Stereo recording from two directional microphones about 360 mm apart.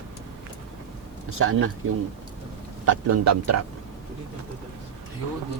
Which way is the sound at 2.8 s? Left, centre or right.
Right.